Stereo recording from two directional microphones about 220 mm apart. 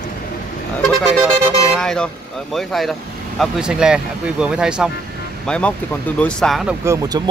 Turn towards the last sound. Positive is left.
turn(degrees=-15)  # may be behind; listen again after turning